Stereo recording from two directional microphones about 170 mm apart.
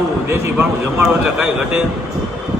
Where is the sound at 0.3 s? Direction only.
15° right (ahead or behind).